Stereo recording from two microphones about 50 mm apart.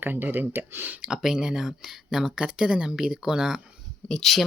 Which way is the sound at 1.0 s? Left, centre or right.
Centre.